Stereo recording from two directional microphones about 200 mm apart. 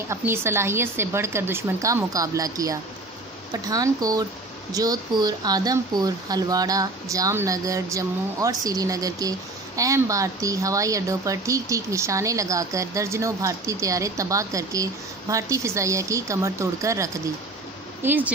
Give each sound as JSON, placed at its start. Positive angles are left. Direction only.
{"t": 0.1, "sound": "speech", "side_deg": -10}